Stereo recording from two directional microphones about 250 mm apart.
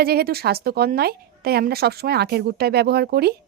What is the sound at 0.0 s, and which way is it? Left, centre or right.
A woman's voice, right.